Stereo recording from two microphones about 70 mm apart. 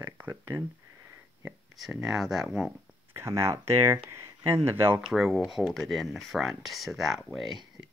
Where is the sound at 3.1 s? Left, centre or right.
Right.